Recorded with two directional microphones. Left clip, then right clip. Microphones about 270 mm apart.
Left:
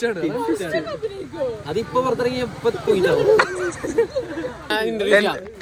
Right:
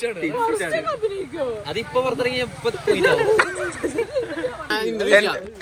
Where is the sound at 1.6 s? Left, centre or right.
Centre.